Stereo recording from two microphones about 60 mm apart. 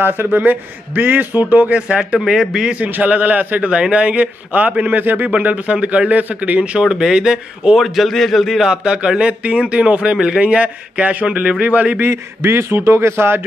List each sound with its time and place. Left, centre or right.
0.0 s a man's voice: right
1.8 s a man's voice: centre
2.1 s a man's voice: centre
2.8 s a man's voice: right
3.7 s a man's voice: centre
6.8 s a man's voice: centre
7.8 s a man's voice: centre
8.6 s a man's voice: centre
12.0 s a man's voice: right